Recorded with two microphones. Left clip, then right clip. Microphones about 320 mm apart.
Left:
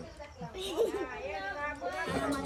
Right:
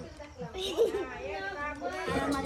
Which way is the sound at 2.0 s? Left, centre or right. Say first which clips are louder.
Right 4 dB; centre.